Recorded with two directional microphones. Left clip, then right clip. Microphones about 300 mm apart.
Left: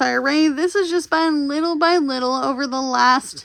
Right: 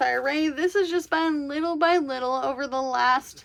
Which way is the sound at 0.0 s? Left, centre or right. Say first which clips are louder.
Left 6 dB; centre.